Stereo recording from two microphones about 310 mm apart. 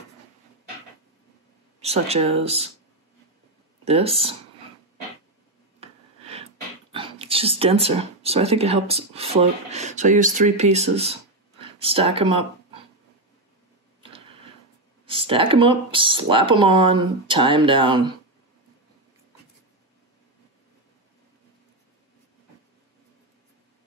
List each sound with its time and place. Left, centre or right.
1.8 s speech: centre
3.8 s speech: centre
5.8 s speech: centre
14.1 s a sound: centre
15.0 s speech: centre